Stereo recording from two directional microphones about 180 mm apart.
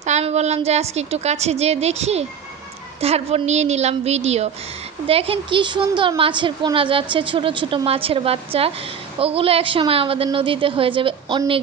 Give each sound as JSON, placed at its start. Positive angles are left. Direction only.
{"t": 0.0, "sound": "a woman's voice", "side_deg": -40}